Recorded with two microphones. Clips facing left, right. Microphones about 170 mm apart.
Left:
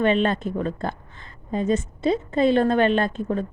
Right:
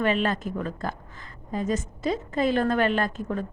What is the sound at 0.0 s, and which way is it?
A woman's voice, 25° left (ahead or behind).